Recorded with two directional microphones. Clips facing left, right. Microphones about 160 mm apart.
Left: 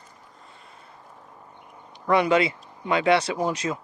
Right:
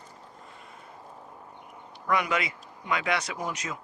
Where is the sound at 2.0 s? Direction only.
30° left (ahead or behind).